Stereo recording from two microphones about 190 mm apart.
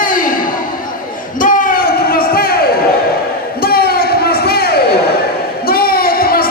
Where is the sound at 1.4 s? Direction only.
45° left (ahead or behind).